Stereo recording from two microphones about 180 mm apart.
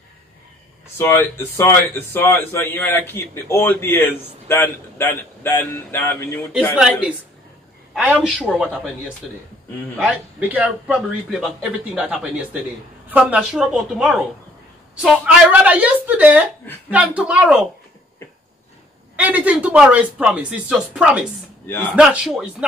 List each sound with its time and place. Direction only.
0.9 s a man's voice: 15° left (ahead or behind)
6.8 s a man's voice: 5° right (ahead or behind)
9.9 s a man's voice: 10° right (ahead or behind)
19.1 s a man's voice: 10° right (ahead or behind)